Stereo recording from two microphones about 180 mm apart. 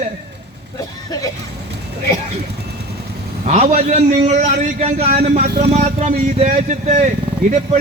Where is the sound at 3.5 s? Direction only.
40° right (ahead or behind).